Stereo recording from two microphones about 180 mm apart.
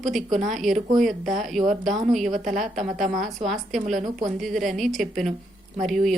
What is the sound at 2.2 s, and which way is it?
Speech, 45° right (ahead or behind).